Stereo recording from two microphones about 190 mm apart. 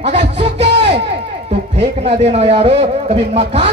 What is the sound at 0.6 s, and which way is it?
Crowd, 35° right (ahead or behind).